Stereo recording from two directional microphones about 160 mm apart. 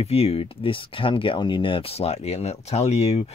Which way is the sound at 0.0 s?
40° left (ahead or behind).